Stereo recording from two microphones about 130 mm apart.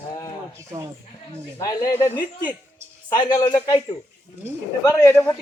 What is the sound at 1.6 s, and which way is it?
Speech, 30° left (ahead or behind).